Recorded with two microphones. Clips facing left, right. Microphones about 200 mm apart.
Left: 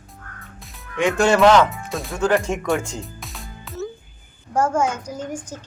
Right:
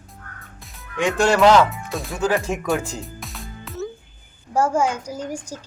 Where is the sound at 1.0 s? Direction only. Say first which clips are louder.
Left 1 dB; centre (ahead or behind).